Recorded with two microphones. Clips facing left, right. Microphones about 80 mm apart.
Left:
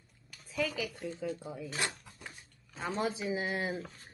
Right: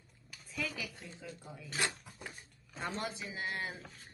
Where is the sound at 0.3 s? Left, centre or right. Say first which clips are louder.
Left 6 dB; centre.